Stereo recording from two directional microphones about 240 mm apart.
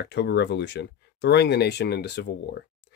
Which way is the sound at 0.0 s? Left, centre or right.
Left.